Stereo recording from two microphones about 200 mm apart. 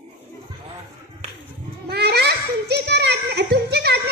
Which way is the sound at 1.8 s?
55° right (ahead or behind).